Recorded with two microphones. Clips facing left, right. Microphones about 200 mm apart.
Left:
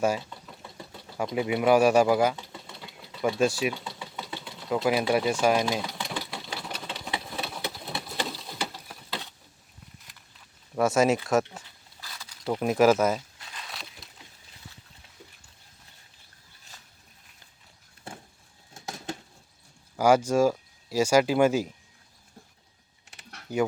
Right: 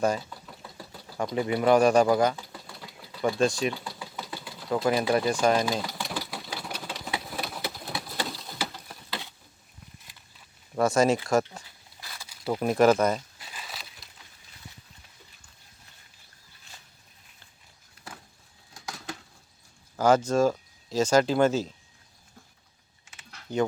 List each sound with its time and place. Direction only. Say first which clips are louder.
0.0 s speech: even; 5° left (ahead or behind)
0.3 s engine: even; centre (ahead or behind)
2.3 s sewing machine: even; centre (ahead or behind)
10.8 s speech: even; 5° left (ahead or behind)
11.9 s zipper: even; 10° right (ahead or behind)
13.4 s crumpling: even; 5° right (ahead or behind)
18.7 s a sound: left 3 dB; 25° left (ahead or behind)
20.0 s speech: left 1 dB; 10° left (ahead or behind)
23.5 s speech: even; 10° left (ahead or behind)